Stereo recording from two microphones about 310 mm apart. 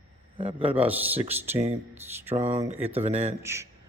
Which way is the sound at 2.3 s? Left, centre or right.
Right.